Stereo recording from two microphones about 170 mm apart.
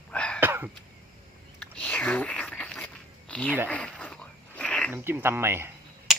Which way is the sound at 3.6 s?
5° left (ahead or behind).